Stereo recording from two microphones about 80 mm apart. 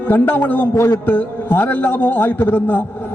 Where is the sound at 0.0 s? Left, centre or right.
Centre.